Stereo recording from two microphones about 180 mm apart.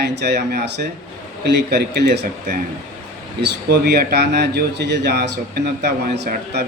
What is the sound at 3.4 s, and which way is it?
A man's voice, 65° right (ahead or behind).